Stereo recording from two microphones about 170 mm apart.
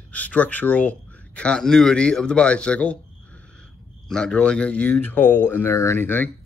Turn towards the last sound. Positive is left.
turn(degrees=10)  # may be behind; listen again after turning